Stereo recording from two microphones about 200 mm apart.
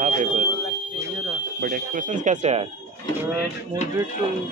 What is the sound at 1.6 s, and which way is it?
Speech, 40° right (ahead or behind).